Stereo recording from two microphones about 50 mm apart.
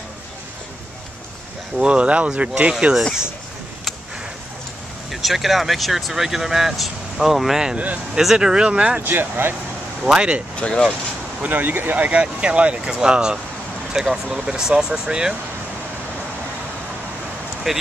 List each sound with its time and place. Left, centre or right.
1.8 s speech: right
5.1 s speech: centre
7.7 s speech: right
8.1 s speech: centre
9.0 s speech: right
10.0 s speech: centre
10.6 s speech: left
11.4 s speech: right; by 15.3 s centre
17.7 s speech: centre